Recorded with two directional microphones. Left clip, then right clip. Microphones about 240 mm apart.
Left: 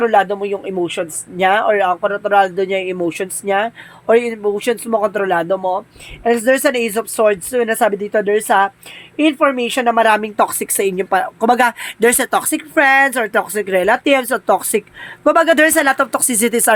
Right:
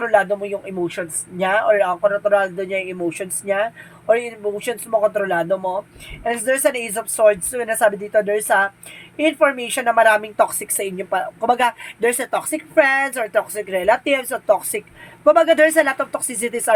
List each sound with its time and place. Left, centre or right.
0.0 s speech: left